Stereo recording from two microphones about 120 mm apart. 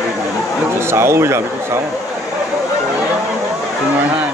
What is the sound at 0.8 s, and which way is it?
Speech, 20° right (ahead or behind).